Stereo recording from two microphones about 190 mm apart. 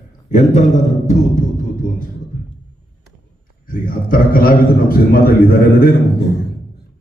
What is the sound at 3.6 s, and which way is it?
A man's voice, 50° left (ahead or behind).